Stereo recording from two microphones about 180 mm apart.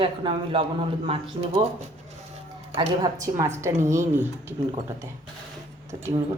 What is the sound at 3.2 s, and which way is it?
Speech, 15° right (ahead or behind).